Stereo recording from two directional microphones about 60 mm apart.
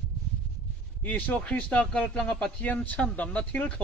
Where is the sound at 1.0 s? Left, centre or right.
Left.